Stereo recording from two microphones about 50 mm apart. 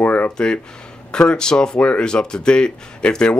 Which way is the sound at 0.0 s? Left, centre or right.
Left.